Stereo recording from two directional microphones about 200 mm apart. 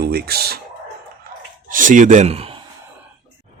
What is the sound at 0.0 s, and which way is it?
Speech, 50° right (ahead or behind).